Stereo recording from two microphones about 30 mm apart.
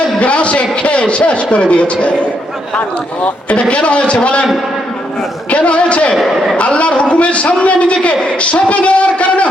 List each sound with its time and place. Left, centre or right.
0.2 s a man's voice: left
3.5 s a man's voice: left
5.5 s a man's voice: left